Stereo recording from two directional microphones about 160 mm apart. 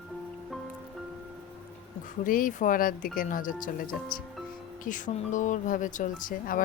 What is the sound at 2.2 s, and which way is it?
Speech, 60° left (ahead or behind).